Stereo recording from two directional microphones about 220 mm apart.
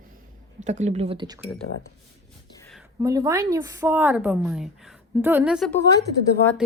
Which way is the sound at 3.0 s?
15° right (ahead or behind).